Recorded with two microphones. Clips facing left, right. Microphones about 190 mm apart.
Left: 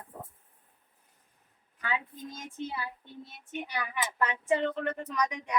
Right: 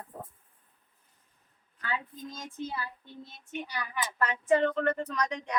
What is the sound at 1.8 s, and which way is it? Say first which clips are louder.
Speech: left 1 dB; 15° left (ahead or behind).